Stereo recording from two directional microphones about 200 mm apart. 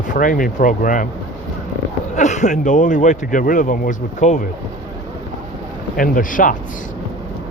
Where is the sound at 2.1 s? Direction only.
35° left (ahead or behind).